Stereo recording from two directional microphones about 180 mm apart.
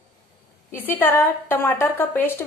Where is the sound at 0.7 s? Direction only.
10° left (ahead or behind).